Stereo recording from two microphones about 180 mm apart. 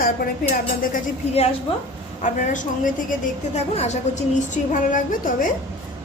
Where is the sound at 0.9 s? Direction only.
35° left (ahead or behind).